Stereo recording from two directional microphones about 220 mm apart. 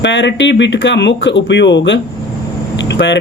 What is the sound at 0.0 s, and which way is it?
Speech, 55° left (ahead or behind).